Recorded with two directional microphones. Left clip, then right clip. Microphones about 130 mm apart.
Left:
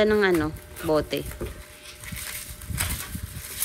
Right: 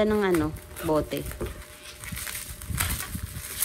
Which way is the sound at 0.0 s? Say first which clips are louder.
Left 4 dB; 50° right (ahead or behind).